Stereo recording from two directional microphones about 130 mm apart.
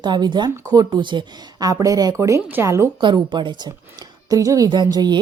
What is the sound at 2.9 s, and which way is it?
A woman's voice, 35° right (ahead or behind).